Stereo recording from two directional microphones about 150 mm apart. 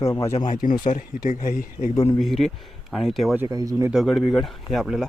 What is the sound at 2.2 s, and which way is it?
Speech, centre (ahead or behind).